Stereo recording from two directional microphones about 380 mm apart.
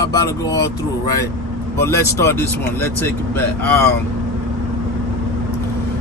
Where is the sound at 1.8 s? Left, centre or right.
Centre.